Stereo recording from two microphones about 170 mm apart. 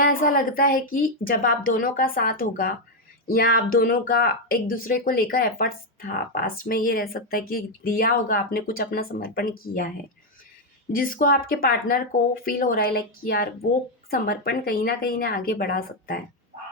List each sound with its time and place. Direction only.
0.0 s speech: 55° left (ahead or behind)
10.9 s speech: 55° left (ahead or behind)